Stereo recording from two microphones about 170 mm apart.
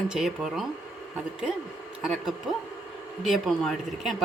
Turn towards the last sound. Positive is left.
turn(degrees=0)  # may be behind; listen again after turning